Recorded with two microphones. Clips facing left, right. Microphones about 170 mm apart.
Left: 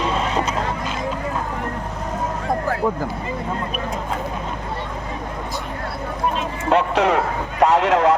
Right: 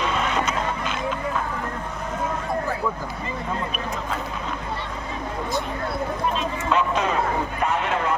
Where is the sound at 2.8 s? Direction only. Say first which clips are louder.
Left 5 dB; 35° left (ahead or behind).